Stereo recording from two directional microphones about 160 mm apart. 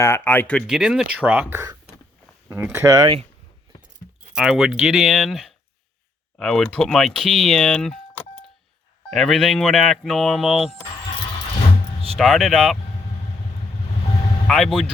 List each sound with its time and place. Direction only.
0.0 s speech: 15° left (ahead or behind)
0.7 s speech: 5° right (ahead or behind); by 3.2 s 25° right (ahead or behind)
4.4 s speech: 5° right (ahead or behind)
9.0 s speech: centre (ahead or behind)
12.1 s speech: centre (ahead or behind)
14.4 s speech: 5° left (ahead or behind)